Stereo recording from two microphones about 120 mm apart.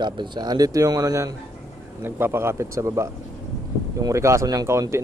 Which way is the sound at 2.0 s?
20° right (ahead or behind).